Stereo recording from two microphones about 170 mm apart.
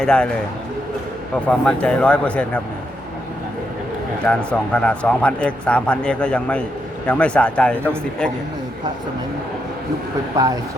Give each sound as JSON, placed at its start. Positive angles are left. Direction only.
{"t": 0.0, "sound": "a man's voice", "side_deg": 5}
{"t": 1.5, "sound": "speech", "side_deg": 5}
{"t": 4.3, "sound": "speech", "side_deg": 5}
{"t": 10.3, "sound": "speech", "side_deg": -20}